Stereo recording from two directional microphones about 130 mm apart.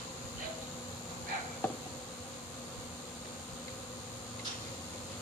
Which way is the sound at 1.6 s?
15° left (ahead or behind).